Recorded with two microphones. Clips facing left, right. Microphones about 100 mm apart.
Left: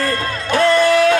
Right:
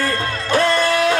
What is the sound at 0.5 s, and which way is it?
Music, 30° right (ahead or behind).